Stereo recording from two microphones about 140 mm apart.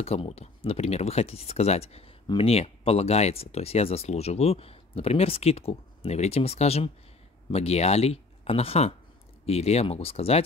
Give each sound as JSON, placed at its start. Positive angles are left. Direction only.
{"t": 0.0, "sound": "speech", "side_deg": 45}